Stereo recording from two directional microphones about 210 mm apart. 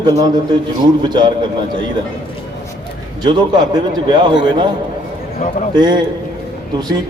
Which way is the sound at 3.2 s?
20° right (ahead or behind).